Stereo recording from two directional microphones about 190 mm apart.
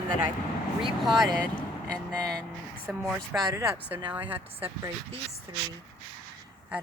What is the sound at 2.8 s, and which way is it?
Speech, 5° right (ahead or behind).